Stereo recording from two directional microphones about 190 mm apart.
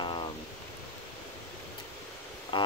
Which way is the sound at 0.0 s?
25° left (ahead or behind).